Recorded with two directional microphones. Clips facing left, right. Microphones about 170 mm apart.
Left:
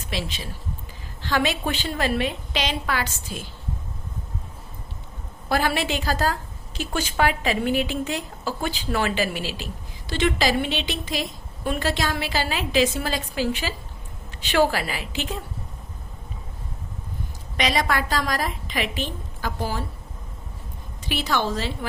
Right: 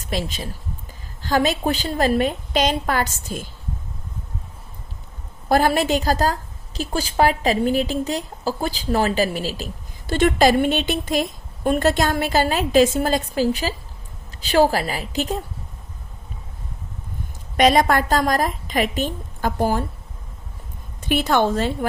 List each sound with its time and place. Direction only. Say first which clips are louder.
0.0 s a woman's voice: right 4 dB; 45° right (ahead or behind)
5.5 s a woman's voice: right 6 dB; 40° right (ahead or behind)
17.6 s a woman's voice: right 7 dB; 50° right (ahead or behind)
21.0 s a woman's voice: right 6 dB; 50° right (ahead or behind)